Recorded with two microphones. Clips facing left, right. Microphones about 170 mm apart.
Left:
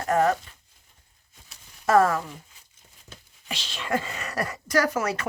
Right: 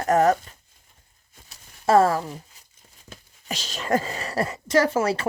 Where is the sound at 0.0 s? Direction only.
45° right (ahead or behind).